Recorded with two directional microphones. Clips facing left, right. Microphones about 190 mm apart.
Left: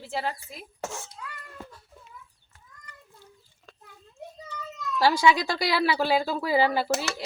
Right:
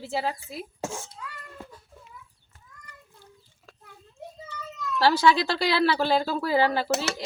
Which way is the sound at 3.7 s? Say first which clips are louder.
Left 1 dB; 5° right (ahead or behind).